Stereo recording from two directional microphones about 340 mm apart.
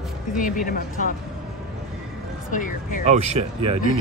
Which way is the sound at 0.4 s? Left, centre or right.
Left.